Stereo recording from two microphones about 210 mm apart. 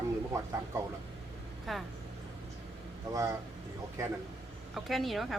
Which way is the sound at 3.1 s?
15° right (ahead or behind).